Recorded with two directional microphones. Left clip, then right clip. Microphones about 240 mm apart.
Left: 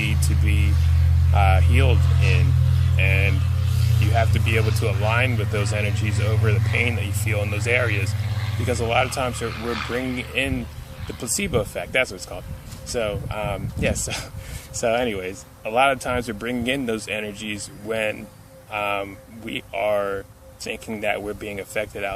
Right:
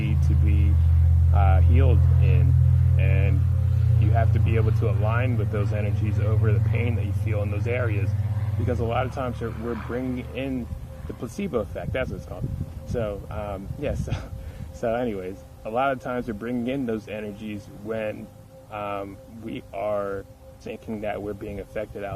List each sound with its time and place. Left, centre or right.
0.0 s music: centre
1.3 s speech: centre
9.6 s speech: left
9.9 s speech: centre